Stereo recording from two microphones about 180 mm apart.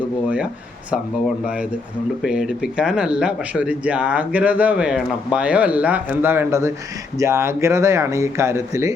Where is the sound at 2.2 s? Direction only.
5° right (ahead or behind).